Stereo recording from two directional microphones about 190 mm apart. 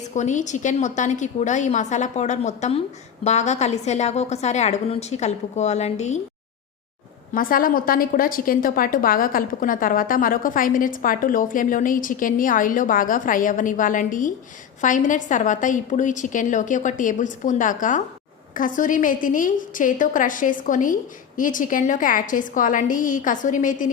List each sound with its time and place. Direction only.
0.1 s a woman's voice: 40° left (ahead or behind)
7.3 s a woman's voice: 45° left (ahead or behind)